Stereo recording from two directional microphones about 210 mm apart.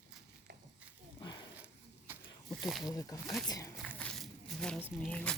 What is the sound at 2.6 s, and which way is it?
Speech, centre (ahead or behind).